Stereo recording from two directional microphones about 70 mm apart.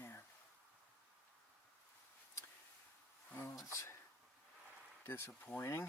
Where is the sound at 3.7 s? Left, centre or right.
Left.